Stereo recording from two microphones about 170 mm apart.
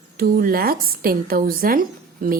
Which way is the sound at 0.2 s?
60° right (ahead or behind).